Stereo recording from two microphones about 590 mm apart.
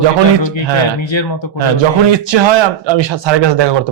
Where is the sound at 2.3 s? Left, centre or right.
Right.